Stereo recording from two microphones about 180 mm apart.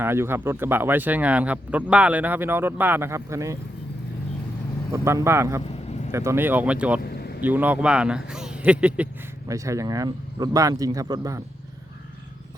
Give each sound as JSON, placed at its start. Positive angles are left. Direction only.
{"t": 0.0, "sound": "speech", "side_deg": -15}
{"t": 4.9, "sound": "speech", "side_deg": -15}
{"t": 5.6, "sound": "vehicle", "side_deg": 40}
{"t": 6.1, "sound": "speech", "side_deg": -15}
{"t": 7.0, "sound": "vehicle", "side_deg": 60}
{"t": 7.4, "sound": "speech", "side_deg": -10}
{"t": 9.5, "sound": "speech", "side_deg": -15}